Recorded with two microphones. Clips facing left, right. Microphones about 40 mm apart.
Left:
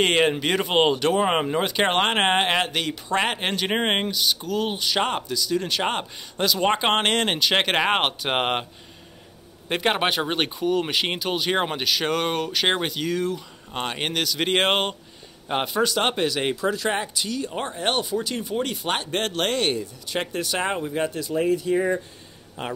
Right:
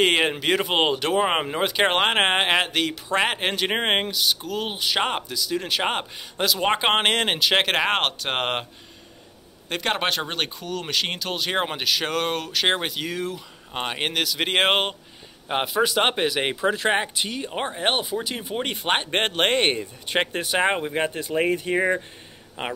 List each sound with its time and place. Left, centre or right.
0.0 s speech: centre
9.7 s speech: centre; by 22.7 s right